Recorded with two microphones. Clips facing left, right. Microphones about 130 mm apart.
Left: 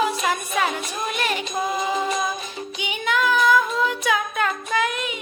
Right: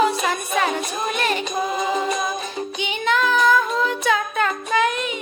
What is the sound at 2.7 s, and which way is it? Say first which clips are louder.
Child singing: right 2 dB; 10° left (ahead or behind).